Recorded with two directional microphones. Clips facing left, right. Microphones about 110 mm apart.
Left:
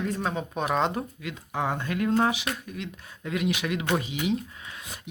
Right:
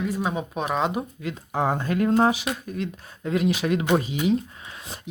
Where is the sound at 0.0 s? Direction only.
10° right (ahead or behind).